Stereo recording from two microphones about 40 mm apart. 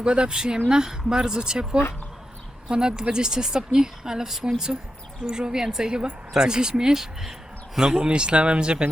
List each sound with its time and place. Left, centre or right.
0.0 s speech: right; by 7.3 s centre
7.9 s speech: right